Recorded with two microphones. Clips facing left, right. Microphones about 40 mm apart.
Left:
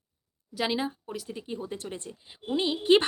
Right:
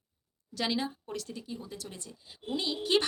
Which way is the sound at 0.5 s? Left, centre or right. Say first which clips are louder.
Left 3 dB; centre.